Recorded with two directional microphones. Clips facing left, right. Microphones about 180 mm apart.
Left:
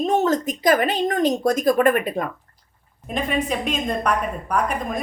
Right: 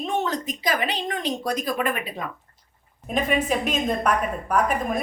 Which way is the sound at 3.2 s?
5° right (ahead or behind).